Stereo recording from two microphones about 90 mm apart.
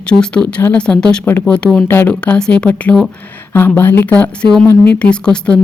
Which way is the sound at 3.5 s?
25° left (ahead or behind).